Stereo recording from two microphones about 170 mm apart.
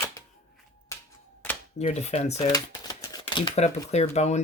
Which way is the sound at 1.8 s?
40° left (ahead or behind).